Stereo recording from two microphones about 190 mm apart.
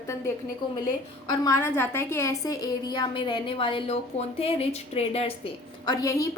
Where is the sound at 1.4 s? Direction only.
15° left (ahead or behind).